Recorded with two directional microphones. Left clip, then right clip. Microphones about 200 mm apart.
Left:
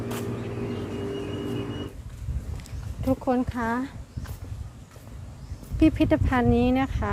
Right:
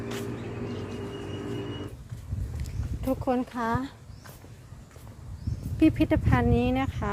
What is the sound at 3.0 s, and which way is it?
Speech, 5° right (ahead or behind).